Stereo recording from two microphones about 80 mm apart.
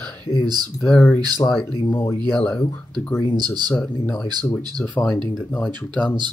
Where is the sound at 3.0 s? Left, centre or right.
Left.